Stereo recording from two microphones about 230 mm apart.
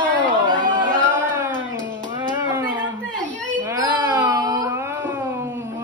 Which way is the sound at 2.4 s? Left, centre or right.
Centre.